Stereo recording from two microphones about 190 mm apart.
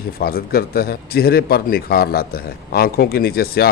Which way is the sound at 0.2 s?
50° left (ahead or behind).